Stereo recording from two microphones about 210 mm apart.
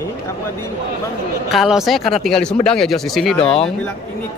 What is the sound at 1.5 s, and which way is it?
Speech, centre (ahead or behind).